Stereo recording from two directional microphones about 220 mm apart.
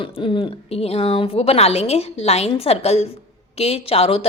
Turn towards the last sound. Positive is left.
turn(degrees=25)  # may be behind; listen again after turning